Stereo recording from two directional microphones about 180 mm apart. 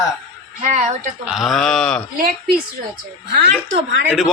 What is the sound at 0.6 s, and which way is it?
Speech, 45° right (ahead or behind).